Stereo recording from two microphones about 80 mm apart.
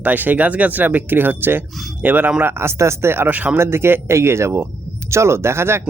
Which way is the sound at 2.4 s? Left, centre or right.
Right.